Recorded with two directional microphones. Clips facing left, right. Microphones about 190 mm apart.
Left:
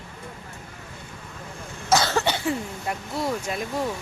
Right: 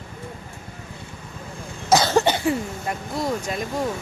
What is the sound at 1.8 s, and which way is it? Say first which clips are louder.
Cough: right 4 dB; 15° right (ahead or behind).